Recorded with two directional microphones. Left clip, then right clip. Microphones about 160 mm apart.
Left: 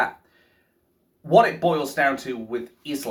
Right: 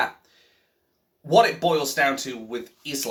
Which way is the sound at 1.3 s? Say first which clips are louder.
Left 1 dB; 10° right (ahead or behind).